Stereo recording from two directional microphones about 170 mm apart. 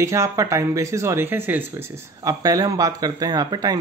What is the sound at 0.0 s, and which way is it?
A man's voice, 20° right (ahead or behind).